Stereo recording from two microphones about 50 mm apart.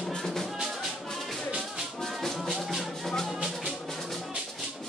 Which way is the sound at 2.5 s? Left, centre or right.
Centre.